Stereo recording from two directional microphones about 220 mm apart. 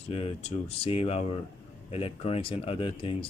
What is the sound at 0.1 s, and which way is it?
Speech, 25° left (ahead or behind).